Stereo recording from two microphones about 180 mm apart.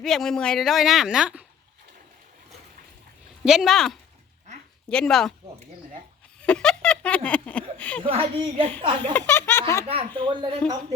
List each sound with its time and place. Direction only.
0.0 s a woman's voice: centre (ahead or behind)
3.4 s a woman's voice: centre (ahead or behind)
6.4 s a sound: 5° left (ahead or behind)
8.0 s speech: 30° right (ahead or behind)
9.1 s snicker: 10° left (ahead or behind)
9.8 s speech: 35° right (ahead or behind)